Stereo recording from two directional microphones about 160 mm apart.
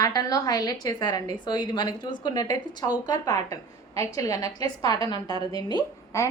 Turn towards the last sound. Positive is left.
turn(degrees=20)  # may be behind; listen again after turning